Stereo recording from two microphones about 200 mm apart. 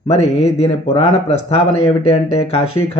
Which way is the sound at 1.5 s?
30° left (ahead or behind).